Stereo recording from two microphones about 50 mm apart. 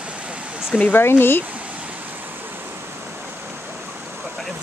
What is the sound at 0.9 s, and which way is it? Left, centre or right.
Speech, left.